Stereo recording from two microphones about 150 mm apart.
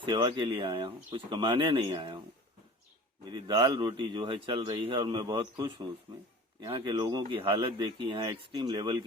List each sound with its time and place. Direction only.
0.0 s speech: 35° right (ahead or behind)
3.2 s speech: 30° right (ahead or behind)